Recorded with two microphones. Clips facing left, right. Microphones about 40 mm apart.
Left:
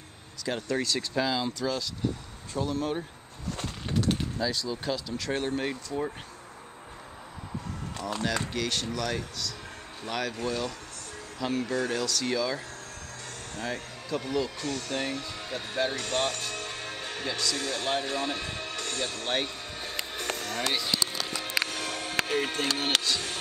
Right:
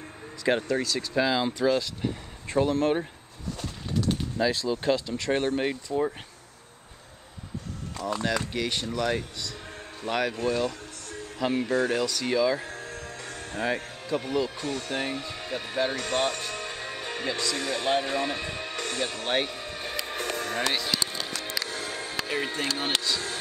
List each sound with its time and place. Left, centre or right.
0.7 s speech: centre
1.1 s speech: right
2.5 s speech: right
4.4 s speech: right
5.6 s speech: centre
8.5 s speech: centre
12.6 s music: right
13.7 s speech: centre
20.1 s music: right
21.5 s music: left